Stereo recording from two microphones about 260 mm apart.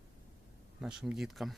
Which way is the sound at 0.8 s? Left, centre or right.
Centre.